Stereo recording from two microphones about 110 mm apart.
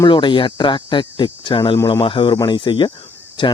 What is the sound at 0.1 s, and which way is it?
Speech, 45° left (ahead or behind).